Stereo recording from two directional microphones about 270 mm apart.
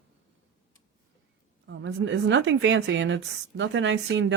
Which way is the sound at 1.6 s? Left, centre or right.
Right.